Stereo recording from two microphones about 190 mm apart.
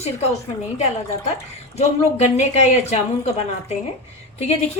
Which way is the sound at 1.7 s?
35° left (ahead or behind).